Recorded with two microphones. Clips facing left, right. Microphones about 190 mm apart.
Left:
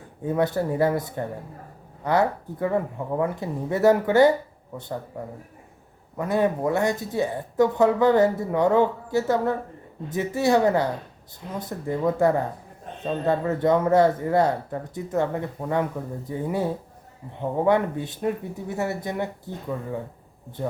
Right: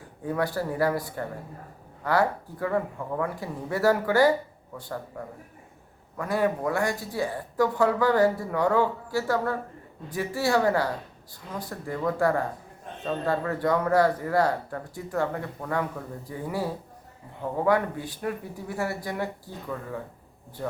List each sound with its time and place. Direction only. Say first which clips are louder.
0.3 s speech: left 4 dB; 20° left (ahead or behind)